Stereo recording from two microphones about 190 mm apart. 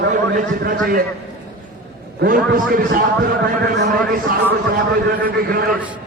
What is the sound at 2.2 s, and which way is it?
A man's voice, 50° right (ahead or behind).